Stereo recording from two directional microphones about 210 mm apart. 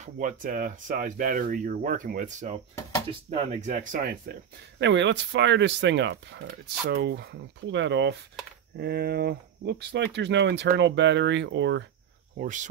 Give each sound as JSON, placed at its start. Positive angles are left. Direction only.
{"t": 0.0, "sound": "speech", "side_deg": -35}
{"t": 12.4, "sound": "speech", "side_deg": -35}